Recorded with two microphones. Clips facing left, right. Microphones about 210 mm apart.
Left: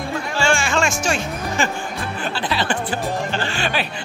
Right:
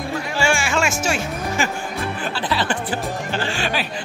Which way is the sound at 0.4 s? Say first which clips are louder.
Left 1 dB; 10° right (ahead or behind).